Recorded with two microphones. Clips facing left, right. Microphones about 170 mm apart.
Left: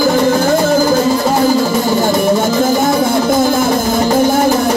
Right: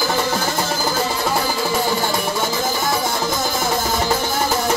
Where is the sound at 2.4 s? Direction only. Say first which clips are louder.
Left 9 dB; 50° left (ahead or behind).